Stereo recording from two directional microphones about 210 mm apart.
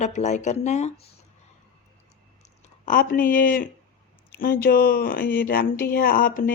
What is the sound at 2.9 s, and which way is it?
Speech, 40° left (ahead or behind).